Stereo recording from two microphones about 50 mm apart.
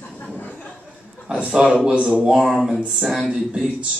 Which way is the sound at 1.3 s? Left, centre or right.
Centre.